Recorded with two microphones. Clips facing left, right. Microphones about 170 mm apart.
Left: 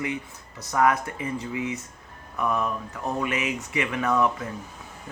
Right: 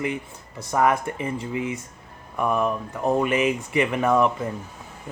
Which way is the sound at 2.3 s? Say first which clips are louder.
Right 4 dB; 25° right (ahead or behind).